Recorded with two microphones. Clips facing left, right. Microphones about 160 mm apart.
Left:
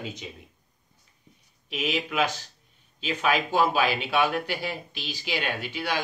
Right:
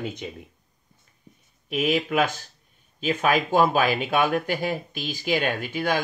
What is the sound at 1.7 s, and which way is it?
Speech, 50° right (ahead or behind).